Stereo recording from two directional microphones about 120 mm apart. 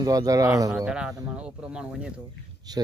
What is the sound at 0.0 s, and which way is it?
Speech, 30° right (ahead or behind).